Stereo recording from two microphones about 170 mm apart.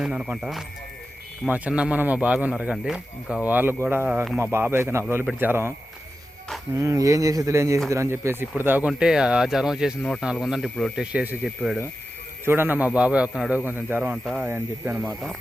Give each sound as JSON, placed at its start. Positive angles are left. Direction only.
{"t": 0.0, "sound": "speech", "side_deg": -5}
{"t": 6.7, "sound": "speech", "side_deg": -20}
{"t": 15.0, "sound": "speech", "side_deg": 0}